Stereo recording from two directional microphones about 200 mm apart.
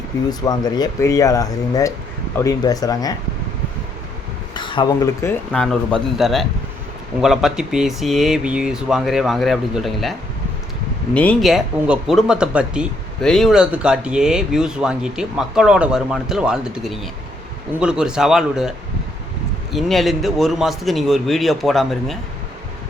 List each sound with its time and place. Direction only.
0.3 s speech: 20° left (ahead or behind)
4.5 s a sound: 25° left (ahead or behind)
5.2 s speech: 5° left (ahead or behind)
19.7 s speech: centre (ahead or behind)